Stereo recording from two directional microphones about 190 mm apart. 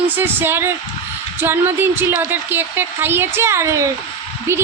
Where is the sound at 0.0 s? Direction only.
10° right (ahead or behind).